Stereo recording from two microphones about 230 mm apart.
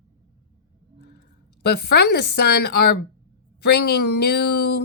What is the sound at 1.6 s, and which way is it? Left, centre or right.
Speech, left.